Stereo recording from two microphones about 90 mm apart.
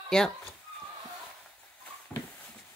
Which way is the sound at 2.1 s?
Centre (ahead or behind).